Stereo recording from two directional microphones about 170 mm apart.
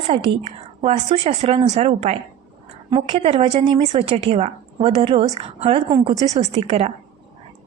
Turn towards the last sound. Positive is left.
turn(degrees=-40)  # may be behind; listen again after turning